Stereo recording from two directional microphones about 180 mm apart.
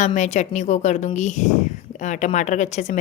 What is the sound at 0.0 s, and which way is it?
A woman's voice, 40° left (ahead or behind).